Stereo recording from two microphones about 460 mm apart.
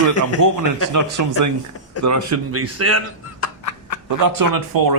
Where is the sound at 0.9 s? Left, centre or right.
Right.